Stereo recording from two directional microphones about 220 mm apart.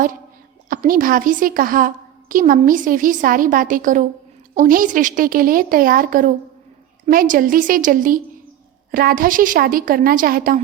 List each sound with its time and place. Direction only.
0.7 s a woman's voice: 40° right (ahead or behind)